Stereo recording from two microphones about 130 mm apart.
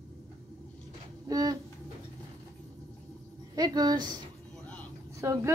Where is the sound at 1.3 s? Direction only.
30° right (ahead or behind).